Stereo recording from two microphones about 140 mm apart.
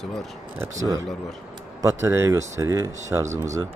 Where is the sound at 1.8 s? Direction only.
20° right (ahead or behind).